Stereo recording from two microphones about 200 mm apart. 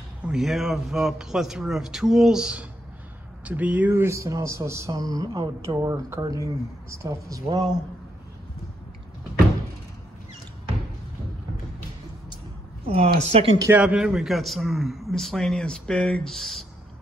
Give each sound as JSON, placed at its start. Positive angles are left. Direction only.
{"t": 0.2, "sound": "a man's voice", "side_deg": -5}
{"t": 12.8, "sound": "a woman's voice", "side_deg": -30}
{"t": 13.7, "sound": "a man's voice", "side_deg": -5}